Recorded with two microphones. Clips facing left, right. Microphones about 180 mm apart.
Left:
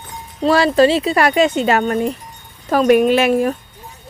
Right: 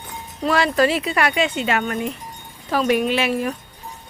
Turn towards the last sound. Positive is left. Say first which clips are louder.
# left 7 dB
turn(degrees=50)  # may be behind; listen again after turning